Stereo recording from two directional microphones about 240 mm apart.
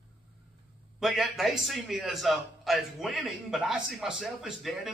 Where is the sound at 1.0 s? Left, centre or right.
Centre.